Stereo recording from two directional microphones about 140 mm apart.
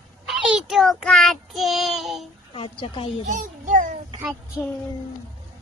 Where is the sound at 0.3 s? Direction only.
5° right (ahead or behind).